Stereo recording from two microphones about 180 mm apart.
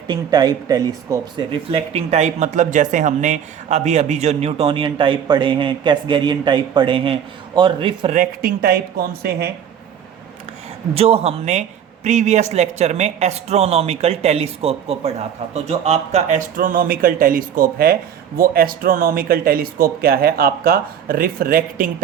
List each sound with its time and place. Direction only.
0.1 s speech: 20° right (ahead or behind)
1.7 s speech: 35° right (ahead or behind)
8.1 s speech: 50° right (ahead or behind)
10.9 s speech: 35° right (ahead or behind); by 21.8 s 55° right (ahead or behind)